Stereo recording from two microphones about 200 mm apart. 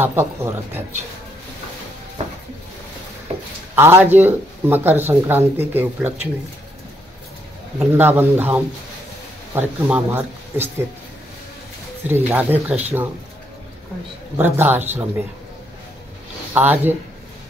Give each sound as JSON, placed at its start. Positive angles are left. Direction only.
{"t": 0.0, "sound": "speech", "side_deg": -10}
{"t": 2.2, "sound": "a sound", "side_deg": -30}
{"t": 3.7, "sound": "speech", "side_deg": -10}
{"t": 7.8, "sound": "speech", "side_deg": -10}
{"t": 12.1, "sound": "speech", "side_deg": -10}
{"t": 14.4, "sound": "speech", "side_deg": -10}
{"t": 16.5, "sound": "speech", "side_deg": -10}